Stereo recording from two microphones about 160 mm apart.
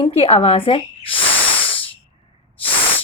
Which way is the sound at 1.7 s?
35° left (ahead or behind).